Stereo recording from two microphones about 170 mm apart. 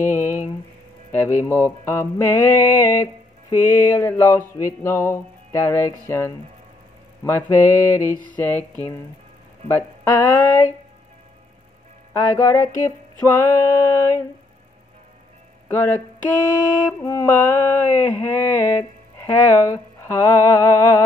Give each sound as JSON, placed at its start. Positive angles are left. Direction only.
{"t": 0.0, "sound": "a sound", "side_deg": 50}
{"t": 1.1, "sound": "music", "side_deg": 15}
{"t": 9.7, "sound": "music", "side_deg": 15}
{"t": 12.1, "sound": "music", "side_deg": 15}
{"t": 15.7, "sound": "music", "side_deg": 15}
{"t": 17.0, "sound": "music", "side_deg": 15}